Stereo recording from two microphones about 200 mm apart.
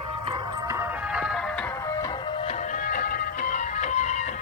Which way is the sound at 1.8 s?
15° left (ahead or behind).